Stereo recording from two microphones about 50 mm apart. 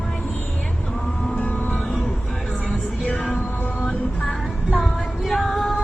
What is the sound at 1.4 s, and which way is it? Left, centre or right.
Music, left.